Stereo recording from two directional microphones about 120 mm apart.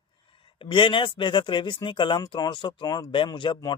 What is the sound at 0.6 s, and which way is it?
Speech, 45° left (ahead or behind).